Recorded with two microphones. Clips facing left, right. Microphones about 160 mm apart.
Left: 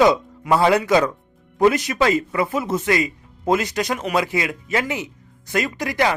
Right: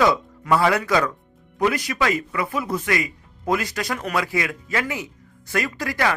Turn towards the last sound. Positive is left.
turn(degrees=20)  # may be behind; listen again after turning